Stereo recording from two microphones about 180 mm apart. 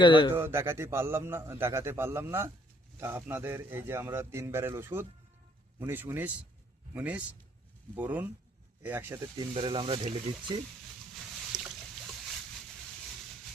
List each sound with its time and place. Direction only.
0.0 s speech: 25° left (ahead or behind)
0.3 s a man's voice: 15° right (ahead or behind)
9.6 s speech: 25° right (ahead or behind)
11.1 s a sound: centre (ahead or behind)